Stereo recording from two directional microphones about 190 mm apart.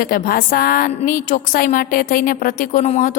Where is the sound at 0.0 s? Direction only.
50° left (ahead or behind).